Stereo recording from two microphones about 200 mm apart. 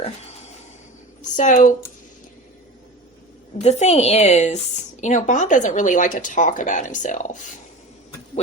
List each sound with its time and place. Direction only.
1.2 s a woman's voice: 40° left (ahead or behind)
3.6 s a woman's voice: 35° left (ahead or behind)